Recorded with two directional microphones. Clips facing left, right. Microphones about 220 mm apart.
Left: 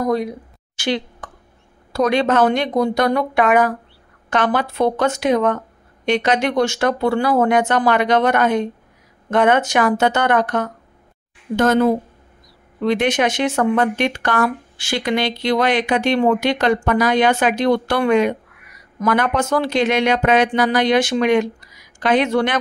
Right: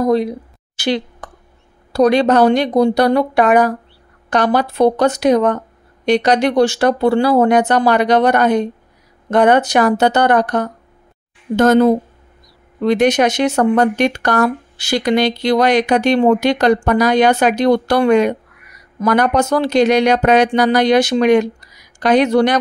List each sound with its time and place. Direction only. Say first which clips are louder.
0.0 s speech: right 5 dB; 30° right (ahead or behind)